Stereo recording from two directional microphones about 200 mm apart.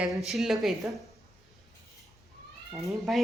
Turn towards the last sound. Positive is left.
turn(degrees=0)  # may be behind; listen again after turning